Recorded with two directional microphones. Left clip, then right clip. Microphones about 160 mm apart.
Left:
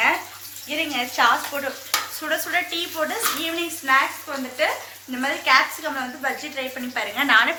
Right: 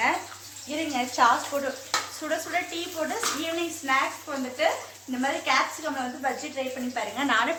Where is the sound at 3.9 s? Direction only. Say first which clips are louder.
Left 6 dB; centre (ahead or behind).